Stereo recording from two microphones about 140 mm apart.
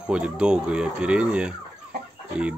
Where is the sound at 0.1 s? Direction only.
5° right (ahead or behind).